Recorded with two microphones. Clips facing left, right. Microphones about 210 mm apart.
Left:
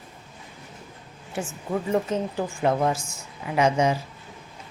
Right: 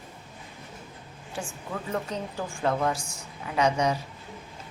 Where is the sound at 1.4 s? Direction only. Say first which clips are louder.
Left 7 dB; 20° left (ahead or behind).